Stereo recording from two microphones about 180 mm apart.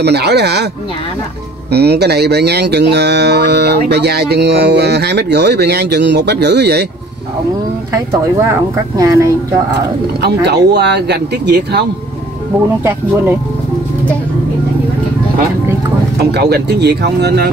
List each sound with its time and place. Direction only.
0.0 s speech: 65° right (ahead or behind)
1.7 s speech: 65° right (ahead or behind)
7.9 s speech: 15° right (ahead or behind)
10.2 s speech: 65° right (ahead or behind)
16.2 s speech: 65° right (ahead or behind)